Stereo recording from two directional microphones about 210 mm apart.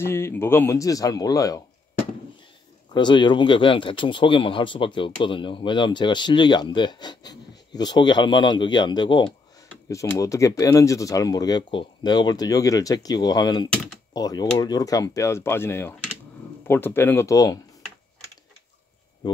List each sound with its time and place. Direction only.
0.0 s speech: 10° left (ahead or behind)
2.9 s speech: 20° left (ahead or behind)